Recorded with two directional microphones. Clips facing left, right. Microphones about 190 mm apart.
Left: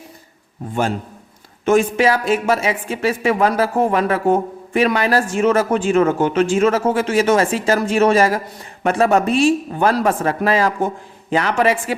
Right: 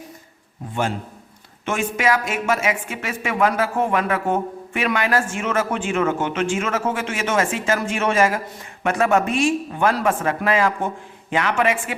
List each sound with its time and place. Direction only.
1.6 s a woman's voice: 35° left (ahead or behind)